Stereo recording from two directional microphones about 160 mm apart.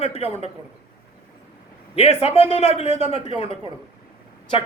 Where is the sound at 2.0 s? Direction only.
40° left (ahead or behind).